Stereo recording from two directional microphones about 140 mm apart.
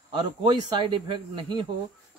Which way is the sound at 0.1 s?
35° right (ahead or behind).